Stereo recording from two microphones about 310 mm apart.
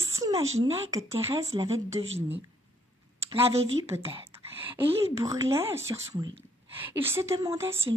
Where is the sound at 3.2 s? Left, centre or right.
Centre.